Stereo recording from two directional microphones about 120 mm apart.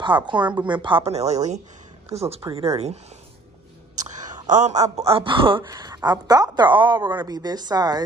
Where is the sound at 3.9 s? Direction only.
90° right.